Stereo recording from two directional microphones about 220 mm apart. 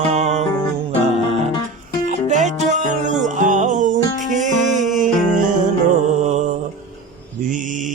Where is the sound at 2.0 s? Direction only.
35° right (ahead or behind).